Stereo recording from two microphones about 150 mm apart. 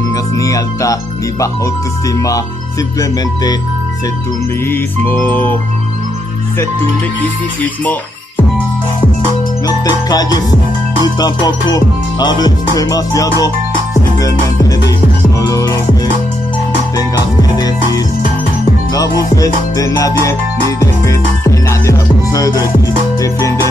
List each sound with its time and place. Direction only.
0.1 s music: 20° left (ahead or behind)
2.1 s music: 20° left (ahead or behind)
4.6 s music: 15° left (ahead or behind)
9.7 s music: 25° left (ahead or behind)
15.5 s music: 20° left (ahead or behind)
16.9 s music: 25° left (ahead or behind)